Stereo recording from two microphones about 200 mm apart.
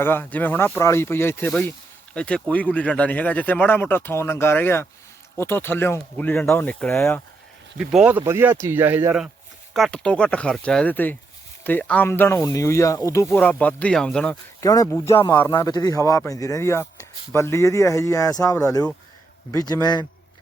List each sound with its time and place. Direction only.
0.0 s speech: 10° left (ahead or behind)
7.8 s speech: 5° right (ahead or behind)
9.7 s speech: 5° left (ahead or behind)
14.6 s speech: 15° left (ahead or behind)